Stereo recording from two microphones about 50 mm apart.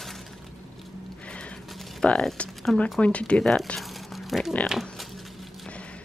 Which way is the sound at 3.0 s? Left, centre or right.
Left.